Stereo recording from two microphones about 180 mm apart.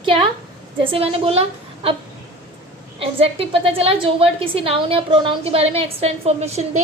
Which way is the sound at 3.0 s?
30° right (ahead or behind).